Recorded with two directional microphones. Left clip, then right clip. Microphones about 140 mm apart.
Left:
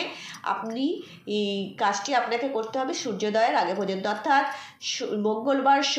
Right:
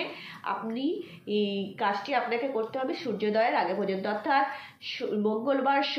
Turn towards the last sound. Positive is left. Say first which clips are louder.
# left 4 dB
turn(degrees=35)  # may be behind; listen again after turning